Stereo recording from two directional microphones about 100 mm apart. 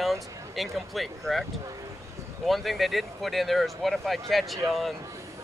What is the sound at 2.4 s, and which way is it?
Speech, centre (ahead or behind).